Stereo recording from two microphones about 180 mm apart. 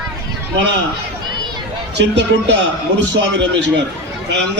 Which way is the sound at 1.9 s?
75° right (ahead or behind).